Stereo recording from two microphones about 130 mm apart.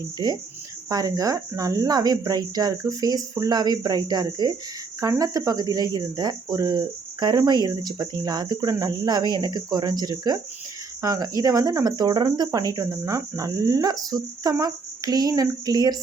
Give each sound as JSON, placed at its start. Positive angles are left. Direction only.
{"t": 0.2, "sound": "speech", "side_deg": -35}